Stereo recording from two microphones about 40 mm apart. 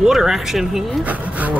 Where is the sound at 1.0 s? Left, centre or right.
Right.